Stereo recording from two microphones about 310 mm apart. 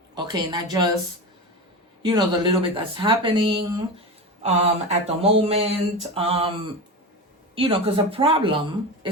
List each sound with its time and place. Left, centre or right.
0.1 s a woman's voice: centre
2.0 s a woman's voice: centre
7.5 s a woman's voice: centre